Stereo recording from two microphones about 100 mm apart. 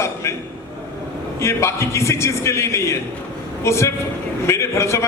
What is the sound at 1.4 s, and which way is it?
A man's voice, 25° left (ahead or behind).